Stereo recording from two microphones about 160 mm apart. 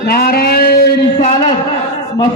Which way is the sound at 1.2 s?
40° left (ahead or behind).